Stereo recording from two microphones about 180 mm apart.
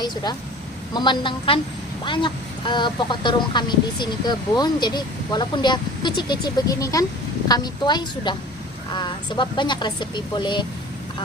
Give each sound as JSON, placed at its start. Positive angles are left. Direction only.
{"t": 0.0, "sound": "speech", "side_deg": 25}